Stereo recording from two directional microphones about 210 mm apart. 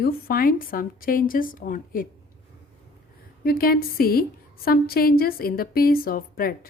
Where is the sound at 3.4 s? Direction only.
45° left (ahead or behind).